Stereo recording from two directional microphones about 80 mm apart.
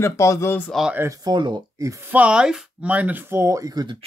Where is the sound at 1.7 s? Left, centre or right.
Right.